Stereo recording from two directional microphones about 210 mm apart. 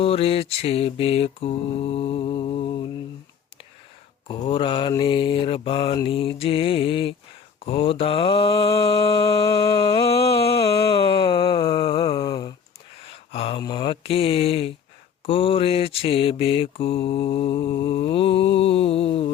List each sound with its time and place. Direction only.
0.0 s mantra: 25° left (ahead or behind)
4.3 s mantra: 25° left (ahead or behind)
10.6 s a sound: 25° left (ahead or behind)
13.3 s mantra: 25° left (ahead or behind)